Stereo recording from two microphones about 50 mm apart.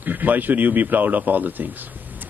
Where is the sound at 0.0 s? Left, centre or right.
Right.